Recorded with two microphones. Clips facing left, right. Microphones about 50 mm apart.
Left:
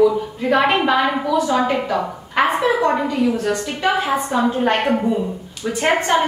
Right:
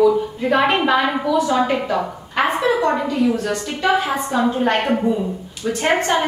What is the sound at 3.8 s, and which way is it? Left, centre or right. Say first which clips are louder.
A woman's voice: even; centre.